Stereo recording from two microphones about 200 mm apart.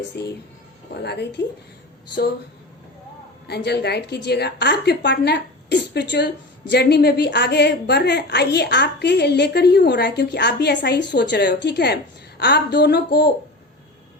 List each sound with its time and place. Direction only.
0.1 s a woman's voice: 55° left (ahead or behind)
3.4 s a woman's voice: 55° left (ahead or behind)